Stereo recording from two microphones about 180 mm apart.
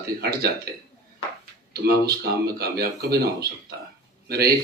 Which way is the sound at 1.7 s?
60° right (ahead or behind).